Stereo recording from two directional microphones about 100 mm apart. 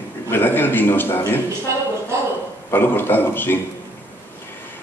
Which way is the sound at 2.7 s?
20° left (ahead or behind).